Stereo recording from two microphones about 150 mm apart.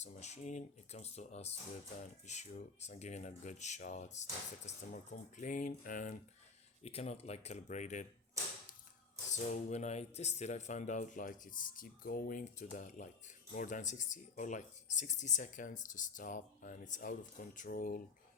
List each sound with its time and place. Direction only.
0.0 s speech: 50° left (ahead or behind)
6.8 s speech: 45° left (ahead or behind)
9.3 s speech: 50° left (ahead or behind); by 18.0 s 70° left (ahead or behind)